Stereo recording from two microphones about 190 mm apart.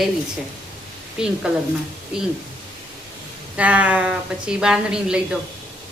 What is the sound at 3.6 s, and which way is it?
A woman's voice, 5° right (ahead or behind).